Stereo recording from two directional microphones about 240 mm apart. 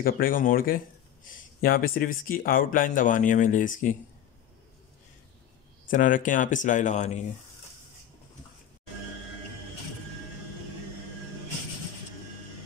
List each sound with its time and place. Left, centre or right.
0.0 s speech: left
5.9 s speech: left